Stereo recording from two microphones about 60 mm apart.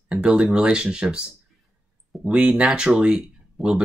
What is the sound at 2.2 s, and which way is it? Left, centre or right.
Speech, right.